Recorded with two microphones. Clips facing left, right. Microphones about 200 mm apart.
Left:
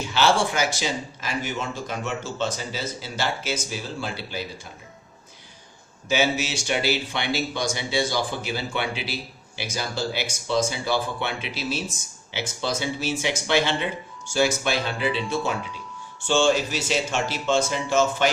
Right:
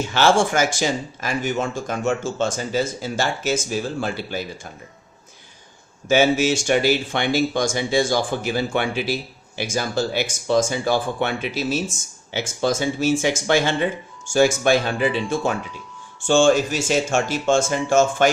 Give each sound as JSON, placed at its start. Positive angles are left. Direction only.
{"t": 0.1, "sound": "speech", "side_deg": -50}
{"t": 6.1, "sound": "speech", "side_deg": -50}